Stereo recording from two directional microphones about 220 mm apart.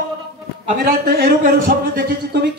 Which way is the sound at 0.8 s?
45° right (ahead or behind).